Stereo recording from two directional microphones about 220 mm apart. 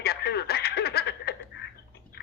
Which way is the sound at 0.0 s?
45° left (ahead or behind).